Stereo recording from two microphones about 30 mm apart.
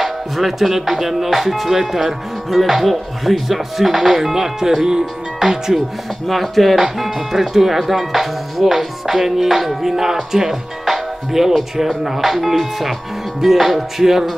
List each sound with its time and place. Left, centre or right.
0.0 s speech: centre
2.5 s speech: centre
6.2 s speech: centre